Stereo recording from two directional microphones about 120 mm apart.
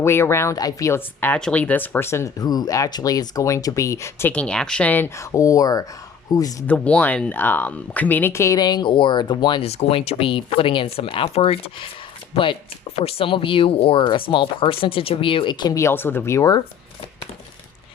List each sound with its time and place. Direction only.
0.0 s speech: 20° left (ahead or behind)
4.3 s speech: 10° left (ahead or behind); by 6.7 s 30° left (ahead or behind)
6.7 s speech: 10° left (ahead or behind); by 9.6 s 40° left (ahead or behind)
9.6 s speech: 55° left (ahead or behind); by 15.7 s 40° left (ahead or behind)
15.7 s speech: 20° left (ahead or behind)